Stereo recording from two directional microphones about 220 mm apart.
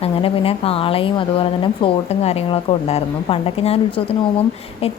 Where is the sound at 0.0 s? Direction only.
25° left (ahead or behind).